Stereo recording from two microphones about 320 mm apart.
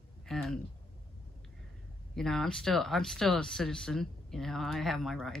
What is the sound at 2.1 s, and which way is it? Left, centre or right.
Speech, centre.